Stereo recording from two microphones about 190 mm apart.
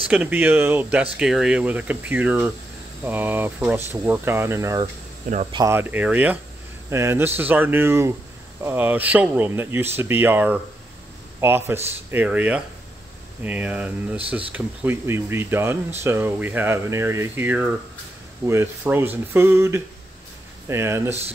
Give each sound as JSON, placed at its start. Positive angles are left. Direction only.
{"t": 0.1, "sound": "speech", "side_deg": -10}